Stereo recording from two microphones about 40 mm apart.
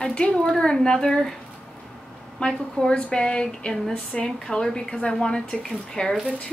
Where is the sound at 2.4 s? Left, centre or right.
Centre.